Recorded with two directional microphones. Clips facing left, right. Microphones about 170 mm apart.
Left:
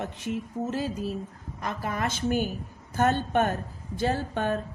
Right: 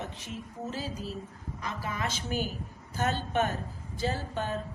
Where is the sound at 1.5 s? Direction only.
50° left (ahead or behind).